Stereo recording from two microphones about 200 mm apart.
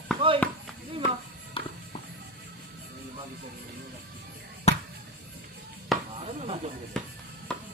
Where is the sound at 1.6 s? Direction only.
25° left (ahead or behind).